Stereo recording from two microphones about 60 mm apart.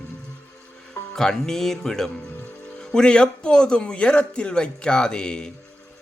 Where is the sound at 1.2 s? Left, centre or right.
Centre.